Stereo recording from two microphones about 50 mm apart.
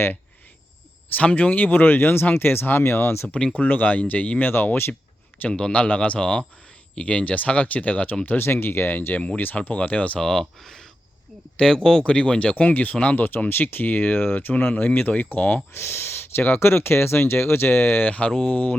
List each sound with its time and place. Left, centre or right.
1.1 s speech: left
3.5 s speech: left
4.4 s speech: left
5.5 s speech: centre
8.4 s speech: left
10.2 s speech: centre; by 14.5 s left
14.5 s speech: left
14.8 s speech: left
15.7 s speech: left
18.0 s speech: left
18.3 s speech: centre
18.5 s speech: left